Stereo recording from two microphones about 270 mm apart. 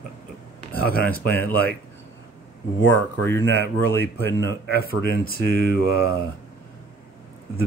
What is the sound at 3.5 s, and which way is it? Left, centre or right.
Speech, left.